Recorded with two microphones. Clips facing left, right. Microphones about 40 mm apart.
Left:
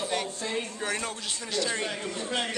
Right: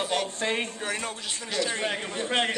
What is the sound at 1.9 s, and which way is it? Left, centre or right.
Speech, right.